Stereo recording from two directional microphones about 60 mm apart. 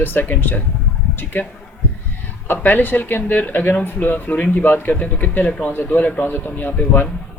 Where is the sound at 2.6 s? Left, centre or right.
Left.